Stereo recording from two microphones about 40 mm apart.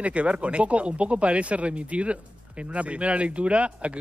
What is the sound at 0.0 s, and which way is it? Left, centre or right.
Speech, right.